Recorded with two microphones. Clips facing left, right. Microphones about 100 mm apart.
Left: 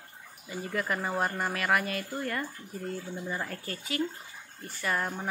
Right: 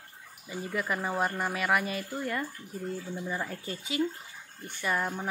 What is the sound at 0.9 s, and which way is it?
Speech, centre (ahead or behind).